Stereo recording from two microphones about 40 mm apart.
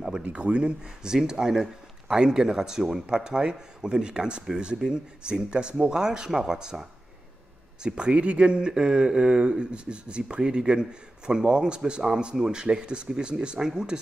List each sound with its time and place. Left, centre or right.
0.2 s speech: right